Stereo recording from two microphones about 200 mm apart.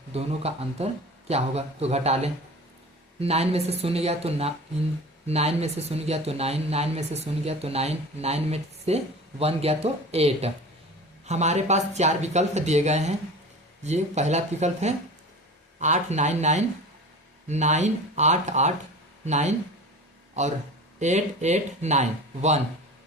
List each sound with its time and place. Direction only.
0.1 s speech: 30° right (ahead or behind)
21.0 s speech: 35° right (ahead or behind)